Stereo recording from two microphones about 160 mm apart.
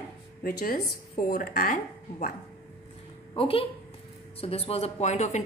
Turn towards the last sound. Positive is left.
turn(degrees=45)  # may be behind; listen again after turning